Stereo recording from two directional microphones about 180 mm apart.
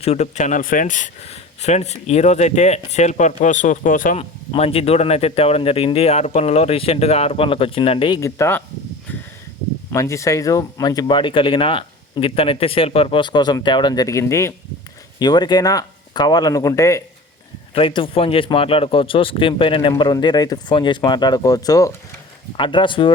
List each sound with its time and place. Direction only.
0.0 s speech: 35° left (ahead or behind)
4.2 s speech: 35° left (ahead or behind)
8.2 s speech: 15° left (ahead or behind)
9.9 s speech: 15° left (ahead or behind)
17.7 s speech: 30° left (ahead or behind)